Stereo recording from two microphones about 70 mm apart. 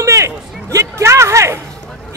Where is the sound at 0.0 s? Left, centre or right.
Right.